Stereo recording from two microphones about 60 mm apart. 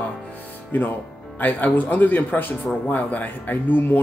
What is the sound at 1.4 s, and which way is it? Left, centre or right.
Speech, left.